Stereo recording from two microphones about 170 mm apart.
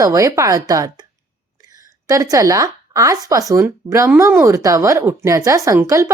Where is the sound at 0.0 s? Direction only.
20° right (ahead or behind).